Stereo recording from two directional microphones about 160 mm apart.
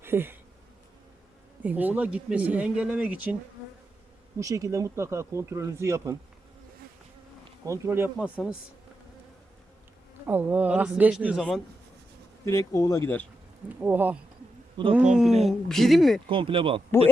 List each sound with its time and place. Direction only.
0.0 s bee: 15° right (ahead or behind)
1.6 s speech: 10° right (ahead or behind)
4.4 s speech: 20° right (ahead or behind)
7.6 s speech: 20° right (ahead or behind)
10.2 s speech: 10° right (ahead or behind)
12.5 s speech: 20° left (ahead or behind)
13.7 s speech: 10° right (ahead or behind)
14.8 s speech: 30° right (ahead or behind)
15.1 s speech: 5° right (ahead or behind)
16.3 s speech: 35° right (ahead or behind)